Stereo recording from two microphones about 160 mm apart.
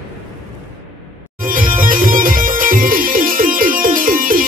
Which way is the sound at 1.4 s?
60° right (ahead or behind).